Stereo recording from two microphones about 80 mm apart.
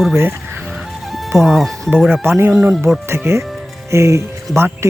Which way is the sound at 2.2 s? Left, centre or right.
Right.